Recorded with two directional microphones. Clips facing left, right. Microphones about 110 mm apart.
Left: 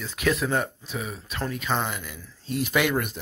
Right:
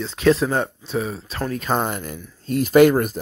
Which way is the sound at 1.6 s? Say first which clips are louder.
Right 6 dB; 45° right (ahead or behind).